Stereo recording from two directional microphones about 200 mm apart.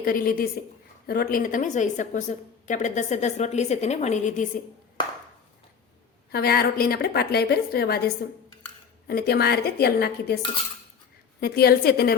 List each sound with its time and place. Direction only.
0.0 s a woman's voice: 45° left (ahead or behind)
6.3 s a woman's voice: 50° left (ahead or behind)
11.3 s a woman's voice: 50° left (ahead or behind)